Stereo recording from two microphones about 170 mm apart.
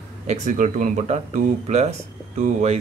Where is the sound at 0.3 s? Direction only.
45° right (ahead or behind).